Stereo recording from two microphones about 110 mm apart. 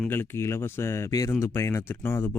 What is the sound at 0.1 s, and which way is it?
Speech, 20° left (ahead or behind).